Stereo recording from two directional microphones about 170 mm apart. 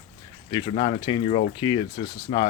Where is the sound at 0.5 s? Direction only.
25° left (ahead or behind).